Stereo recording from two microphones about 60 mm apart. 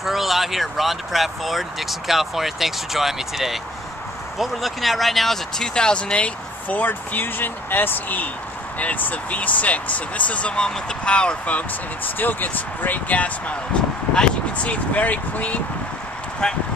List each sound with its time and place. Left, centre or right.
0.0 s speech: centre
12.2 s speech: left